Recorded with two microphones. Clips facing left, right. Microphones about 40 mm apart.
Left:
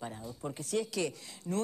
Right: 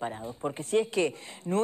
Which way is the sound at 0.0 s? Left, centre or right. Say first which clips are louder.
Right 7 dB; right.